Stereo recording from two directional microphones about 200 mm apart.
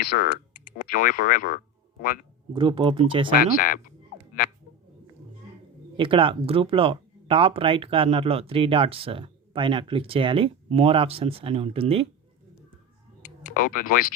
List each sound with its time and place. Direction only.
0.1 s speech: 50° left (ahead or behind)
2.5 s speech: 25° right (ahead or behind)
3.3 s speech: 45° left (ahead or behind)
6.0 s speech: 25° right (ahead or behind)
13.2 s speech: 45° left (ahead or behind)